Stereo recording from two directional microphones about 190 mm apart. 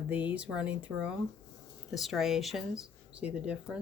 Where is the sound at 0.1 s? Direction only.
10° right (ahead or behind).